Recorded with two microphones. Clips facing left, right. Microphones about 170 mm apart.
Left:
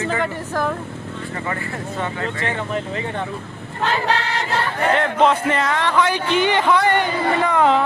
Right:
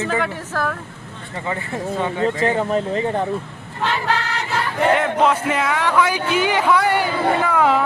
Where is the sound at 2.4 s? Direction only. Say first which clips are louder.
Right 4 dB; 35° right (ahead or behind).